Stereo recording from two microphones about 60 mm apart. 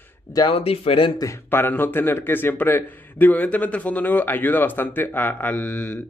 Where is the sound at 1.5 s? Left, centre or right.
Left.